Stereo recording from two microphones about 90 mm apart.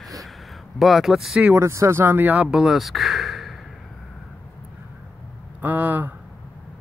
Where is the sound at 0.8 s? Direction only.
Centre (ahead or behind).